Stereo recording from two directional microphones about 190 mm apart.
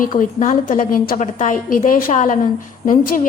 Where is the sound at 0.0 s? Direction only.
45° left (ahead or behind).